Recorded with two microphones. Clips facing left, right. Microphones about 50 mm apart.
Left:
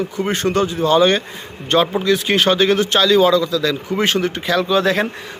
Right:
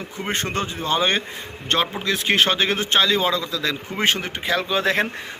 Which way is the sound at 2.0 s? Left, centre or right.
Right.